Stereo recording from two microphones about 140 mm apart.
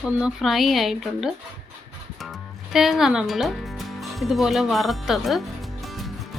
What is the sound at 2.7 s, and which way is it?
Speech, centre (ahead or behind).